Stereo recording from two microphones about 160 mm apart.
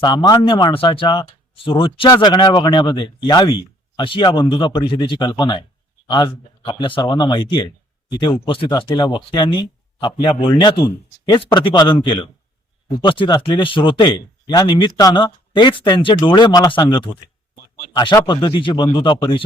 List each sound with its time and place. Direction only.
0.0 s speech: 30° left (ahead or behind)
17.5 s a sound: 65° left (ahead or behind)
17.9 s speech: 25° left (ahead or behind)